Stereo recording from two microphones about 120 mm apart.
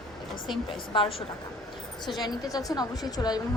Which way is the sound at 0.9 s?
50° left (ahead or behind).